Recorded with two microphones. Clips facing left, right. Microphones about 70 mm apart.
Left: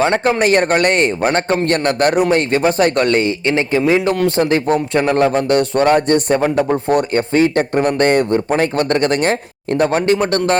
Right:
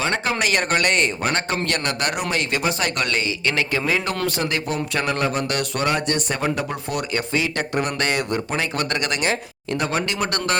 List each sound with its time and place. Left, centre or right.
0.0 s a man's voice: left
3.4 s speech: left
4.4 s a man's voice: left